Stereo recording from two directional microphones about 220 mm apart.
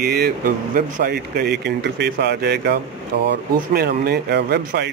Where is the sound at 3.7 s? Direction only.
45° right (ahead or behind).